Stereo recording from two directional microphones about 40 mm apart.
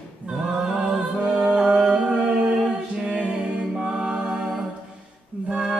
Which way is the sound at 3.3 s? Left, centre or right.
Centre.